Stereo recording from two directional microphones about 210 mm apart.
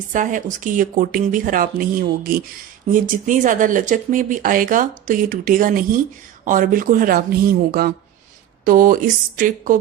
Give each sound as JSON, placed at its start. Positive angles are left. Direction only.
{"t": 0.1, "sound": "speech", "side_deg": -40}